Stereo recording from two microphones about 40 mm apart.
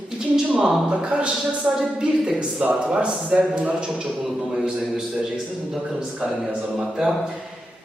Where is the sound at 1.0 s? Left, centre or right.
Right.